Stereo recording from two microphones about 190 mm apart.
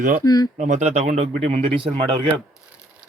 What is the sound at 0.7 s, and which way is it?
Speech, 35° right (ahead or behind).